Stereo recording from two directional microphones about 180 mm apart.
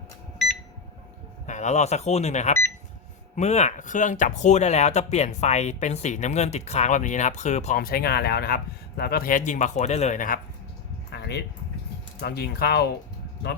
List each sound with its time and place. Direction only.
1.5 s speech: 40° left (ahead or behind)
7.8 s speech: 55° left (ahead or behind)
11.1 s a sound: 65° left (ahead or behind)
12.2 s speech: 60° left (ahead or behind)